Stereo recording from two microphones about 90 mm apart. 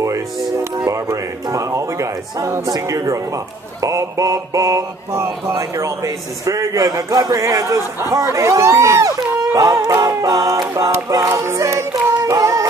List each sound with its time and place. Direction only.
0.8 s speech: 35° right (ahead or behind)
2.7 s mantra: 40° right (ahead or behind)
10.2 s music: 45° right (ahead or behind)
10.9 s mantra: 40° right (ahead or behind)
12.2 s child singing: 40° right (ahead or behind)